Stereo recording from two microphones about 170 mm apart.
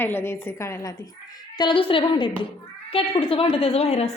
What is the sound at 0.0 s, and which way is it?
Speech, 15° left (ahead or behind).